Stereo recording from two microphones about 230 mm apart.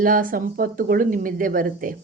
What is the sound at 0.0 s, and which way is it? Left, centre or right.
Speech, right.